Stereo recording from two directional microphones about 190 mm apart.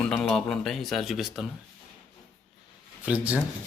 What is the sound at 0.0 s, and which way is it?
Speech, centre (ahead or behind).